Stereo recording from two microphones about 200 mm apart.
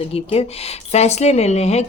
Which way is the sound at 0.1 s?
30° left (ahead or behind).